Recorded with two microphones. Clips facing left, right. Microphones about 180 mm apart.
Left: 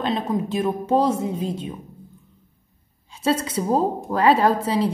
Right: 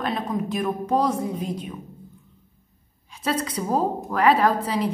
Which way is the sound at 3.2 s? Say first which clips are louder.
Left 4 dB; 25° left (ahead or behind).